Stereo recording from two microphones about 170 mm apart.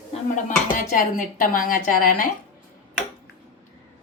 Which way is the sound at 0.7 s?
50° left (ahead or behind).